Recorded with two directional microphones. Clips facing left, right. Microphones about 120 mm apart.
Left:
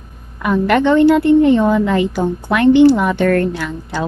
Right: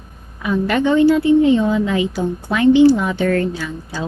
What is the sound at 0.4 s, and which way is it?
A woman's voice, 65° left (ahead or behind).